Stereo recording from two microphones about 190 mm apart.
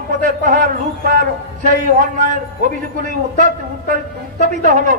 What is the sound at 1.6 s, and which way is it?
Speech, 40° right (ahead or behind).